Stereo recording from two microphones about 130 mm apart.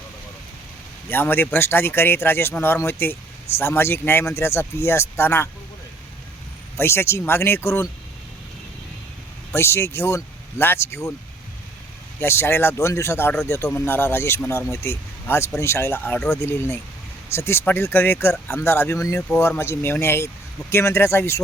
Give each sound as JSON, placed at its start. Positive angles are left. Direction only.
{"t": 1.1, "sound": "speech", "side_deg": 15}
{"t": 6.7, "sound": "speech", "side_deg": 20}
{"t": 9.5, "sound": "speech", "side_deg": 20}
{"t": 12.2, "sound": "speech", "side_deg": 20}